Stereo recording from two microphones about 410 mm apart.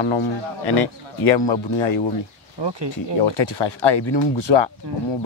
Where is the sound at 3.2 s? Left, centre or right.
Left.